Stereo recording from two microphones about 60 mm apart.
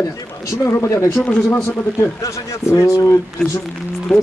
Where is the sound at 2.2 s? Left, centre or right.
Left.